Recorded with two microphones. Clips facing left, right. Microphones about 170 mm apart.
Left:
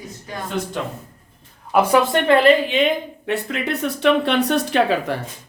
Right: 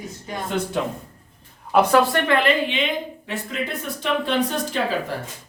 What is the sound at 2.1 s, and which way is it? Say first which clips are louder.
Speech: left 6 dB; 30° left (ahead or behind).